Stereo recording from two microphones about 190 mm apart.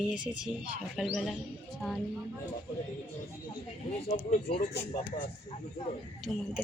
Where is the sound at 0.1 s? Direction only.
5° right (ahead or behind).